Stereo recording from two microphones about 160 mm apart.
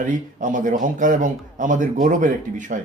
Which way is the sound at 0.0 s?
55° right (ahead or behind).